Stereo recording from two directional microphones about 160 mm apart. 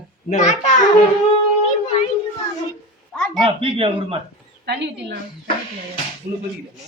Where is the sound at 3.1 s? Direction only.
5° left (ahead or behind).